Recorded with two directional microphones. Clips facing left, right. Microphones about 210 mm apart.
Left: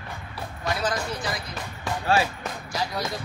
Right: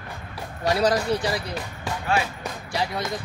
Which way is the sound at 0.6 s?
35° right (ahead or behind).